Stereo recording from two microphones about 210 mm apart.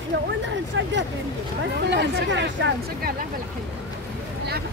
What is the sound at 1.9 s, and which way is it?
Speech, 55° right (ahead or behind).